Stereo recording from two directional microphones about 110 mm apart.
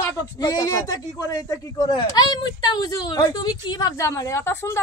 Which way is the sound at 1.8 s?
45° left (ahead or behind).